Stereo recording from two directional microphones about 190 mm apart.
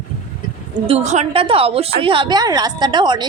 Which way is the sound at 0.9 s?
35° right (ahead or behind).